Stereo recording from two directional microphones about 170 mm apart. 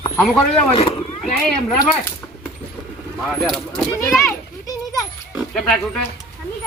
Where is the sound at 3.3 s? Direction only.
Centre (ahead or behind).